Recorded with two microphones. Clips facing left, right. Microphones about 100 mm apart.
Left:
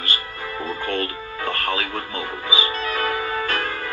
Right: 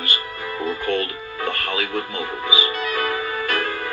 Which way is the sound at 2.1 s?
20° right (ahead or behind).